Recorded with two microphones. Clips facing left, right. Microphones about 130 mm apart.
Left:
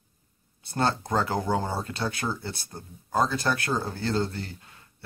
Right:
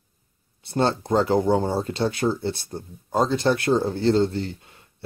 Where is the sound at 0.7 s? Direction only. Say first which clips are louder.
Right 5 dB; 25° right (ahead or behind).